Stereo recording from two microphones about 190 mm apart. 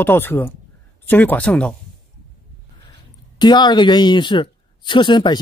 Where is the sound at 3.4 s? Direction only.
20° left (ahead or behind).